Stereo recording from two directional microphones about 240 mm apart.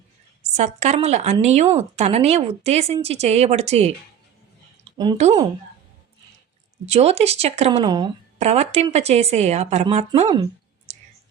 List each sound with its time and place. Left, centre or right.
0.5 s a woman's voice: right
4.9 s a woman's voice: right
6.8 s a woman's voice: right